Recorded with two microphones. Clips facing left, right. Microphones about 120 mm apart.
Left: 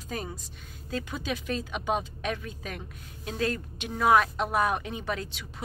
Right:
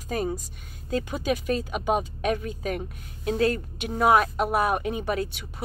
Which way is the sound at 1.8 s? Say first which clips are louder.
Right 3 dB; 10° right (ahead or behind).